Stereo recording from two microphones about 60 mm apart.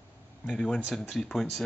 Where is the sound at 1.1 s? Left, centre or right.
Centre.